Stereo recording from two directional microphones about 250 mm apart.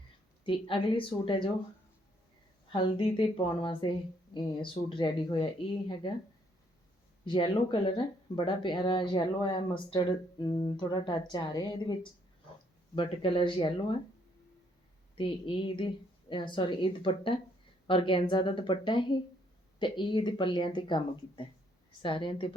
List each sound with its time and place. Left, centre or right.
0.4 s speech: centre
2.7 s speech: centre
7.3 s speech: centre
13.0 s speech: centre
15.2 s speech: centre